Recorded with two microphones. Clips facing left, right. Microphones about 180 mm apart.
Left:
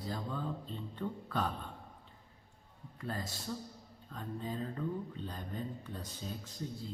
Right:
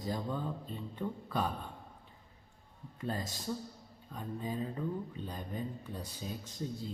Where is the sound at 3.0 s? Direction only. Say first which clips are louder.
Right 3 dB; 20° right (ahead or behind).